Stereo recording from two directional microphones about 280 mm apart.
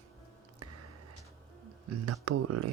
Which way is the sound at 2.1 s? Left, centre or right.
Right.